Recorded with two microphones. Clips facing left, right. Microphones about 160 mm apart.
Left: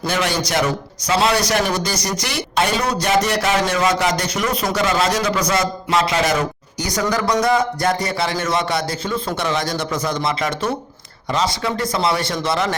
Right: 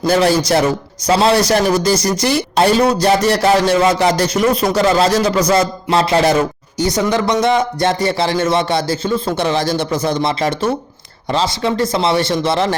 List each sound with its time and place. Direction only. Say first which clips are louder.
0.0 s speech: right 8 dB; 35° right (ahead or behind)